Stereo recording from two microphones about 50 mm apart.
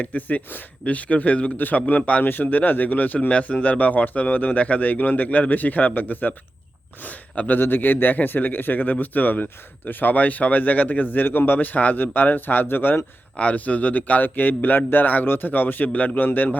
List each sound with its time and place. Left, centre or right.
0.0 s speech: left
7.6 s speech: left
13.3 s speech: left
15.9 s a man's voice: left
16.1 s speech: left